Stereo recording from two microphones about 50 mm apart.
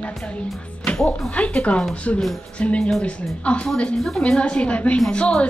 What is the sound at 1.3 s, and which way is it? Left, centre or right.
Speech, left.